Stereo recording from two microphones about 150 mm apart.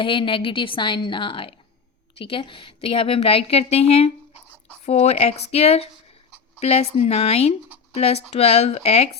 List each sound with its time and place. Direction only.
0.0 s a woman's voice: 35° left (ahead or behind)